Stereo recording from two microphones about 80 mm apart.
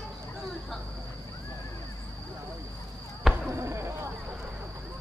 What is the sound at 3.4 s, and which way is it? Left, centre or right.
Arrow, right.